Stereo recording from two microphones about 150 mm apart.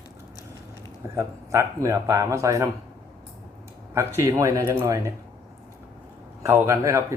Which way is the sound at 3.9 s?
20° right (ahead or behind).